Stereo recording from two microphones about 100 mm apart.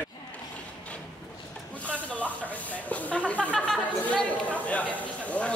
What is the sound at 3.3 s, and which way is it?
Chatter, 15° left (ahead or behind).